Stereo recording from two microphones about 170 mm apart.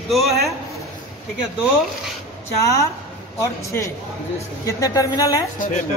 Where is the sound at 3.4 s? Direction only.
15° left (ahead or behind).